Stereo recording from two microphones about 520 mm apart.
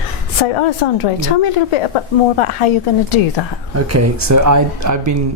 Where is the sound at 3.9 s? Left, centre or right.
Right.